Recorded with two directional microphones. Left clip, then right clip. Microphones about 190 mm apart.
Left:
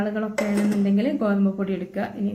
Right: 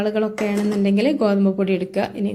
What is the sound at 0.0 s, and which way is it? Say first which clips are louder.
Speech: right 5 dB; 30° right (ahead or behind).